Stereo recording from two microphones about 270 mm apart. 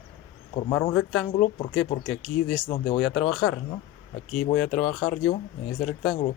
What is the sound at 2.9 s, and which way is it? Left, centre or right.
Speech, centre.